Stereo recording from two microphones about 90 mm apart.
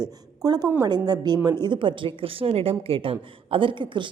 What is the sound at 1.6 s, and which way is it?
A woman's voice, 65° right (ahead or behind).